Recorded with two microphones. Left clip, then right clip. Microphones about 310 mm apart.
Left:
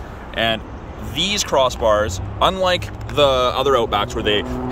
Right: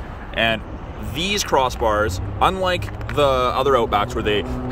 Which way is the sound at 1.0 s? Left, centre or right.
Centre.